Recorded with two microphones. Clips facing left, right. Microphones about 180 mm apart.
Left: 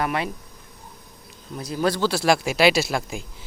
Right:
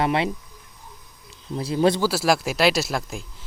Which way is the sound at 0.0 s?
25° right (ahead or behind).